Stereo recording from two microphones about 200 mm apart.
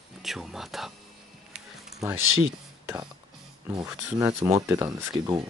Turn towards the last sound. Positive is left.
turn(degrees=-20)  # may be behind; listen again after turning